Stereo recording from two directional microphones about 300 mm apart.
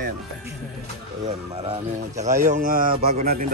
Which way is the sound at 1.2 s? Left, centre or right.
Centre.